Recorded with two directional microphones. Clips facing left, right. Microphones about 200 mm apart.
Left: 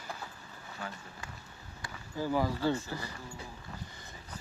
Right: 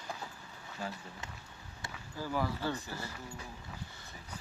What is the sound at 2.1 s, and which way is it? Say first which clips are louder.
Speech: left 4 dB; 15° left (ahead or behind).